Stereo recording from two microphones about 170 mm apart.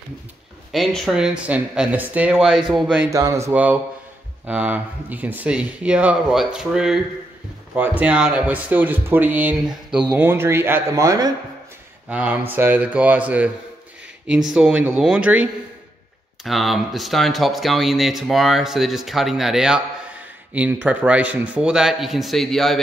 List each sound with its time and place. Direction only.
0.7 s speech: centre (ahead or behind)
3.1 s speech: 20° right (ahead or behind)
12.1 s speech: 10° right (ahead or behind)